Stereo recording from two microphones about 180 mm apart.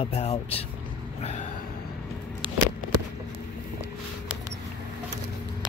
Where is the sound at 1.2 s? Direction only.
40° left (ahead or behind).